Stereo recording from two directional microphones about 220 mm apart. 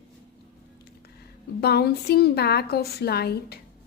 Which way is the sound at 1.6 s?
45° left (ahead or behind).